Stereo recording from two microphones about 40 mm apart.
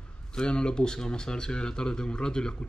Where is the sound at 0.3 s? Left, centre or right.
Left.